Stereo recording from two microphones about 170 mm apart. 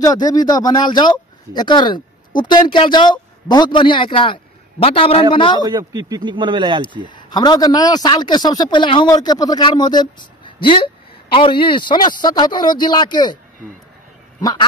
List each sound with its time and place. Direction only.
0.0 s a man's voice: 25° left (ahead or behind)
5.6 s speech: 20° right (ahead or behind)
7.1 s a man's voice: 25° left (ahead or behind)
14.4 s a man's voice: 25° left (ahead or behind)